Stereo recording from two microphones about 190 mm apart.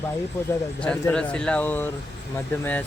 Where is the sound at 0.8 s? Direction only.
5° left (ahead or behind).